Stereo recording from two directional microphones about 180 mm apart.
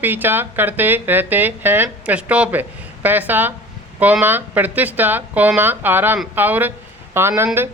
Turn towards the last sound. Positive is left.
turn(degrees=-15)  # may be behind; listen again after turning